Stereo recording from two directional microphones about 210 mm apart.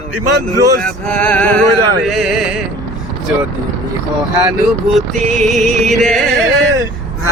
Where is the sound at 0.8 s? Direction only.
5° left (ahead or behind).